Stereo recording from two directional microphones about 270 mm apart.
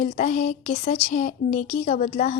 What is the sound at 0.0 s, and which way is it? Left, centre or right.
A woman's voice, left.